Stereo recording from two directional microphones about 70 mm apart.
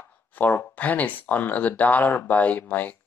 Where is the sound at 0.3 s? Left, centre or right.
Left.